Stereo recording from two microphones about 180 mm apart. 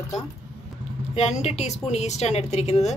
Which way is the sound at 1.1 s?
40° left (ahead or behind).